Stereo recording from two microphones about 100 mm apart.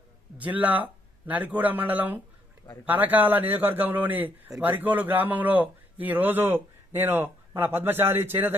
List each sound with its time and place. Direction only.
0.3 s a man's voice: 15° right (ahead or behind)